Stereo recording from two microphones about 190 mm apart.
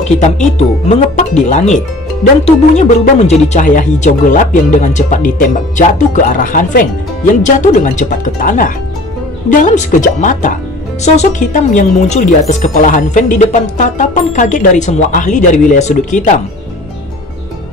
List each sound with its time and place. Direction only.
0.2 s speech: 35° left (ahead or behind)